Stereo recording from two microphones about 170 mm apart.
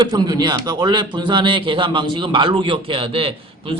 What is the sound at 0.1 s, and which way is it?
A man's voice, 25° right (ahead or behind).